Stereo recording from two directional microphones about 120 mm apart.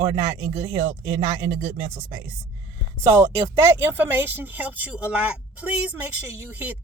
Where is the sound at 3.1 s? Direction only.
20° right (ahead or behind).